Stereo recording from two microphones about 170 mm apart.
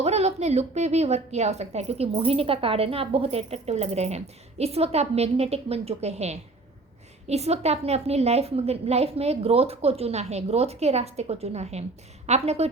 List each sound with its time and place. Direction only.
0.0 s a woman's voice: 40° right (ahead or behind)